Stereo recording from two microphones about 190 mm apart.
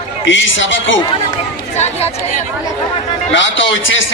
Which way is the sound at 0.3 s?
80° left.